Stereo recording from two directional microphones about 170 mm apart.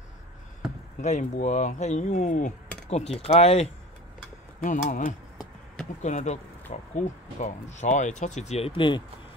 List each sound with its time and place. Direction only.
1.0 s speech: 45° left (ahead or behind)
4.6 s speech: 50° left (ahead or behind); by 9.0 s 30° left (ahead or behind)